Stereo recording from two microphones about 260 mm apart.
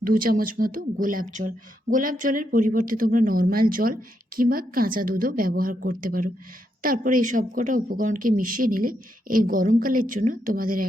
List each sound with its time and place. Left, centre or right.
0.0 s speech: right